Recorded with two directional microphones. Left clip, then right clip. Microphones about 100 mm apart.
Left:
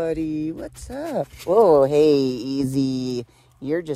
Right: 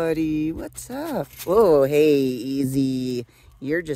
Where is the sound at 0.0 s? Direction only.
60° right (ahead or behind).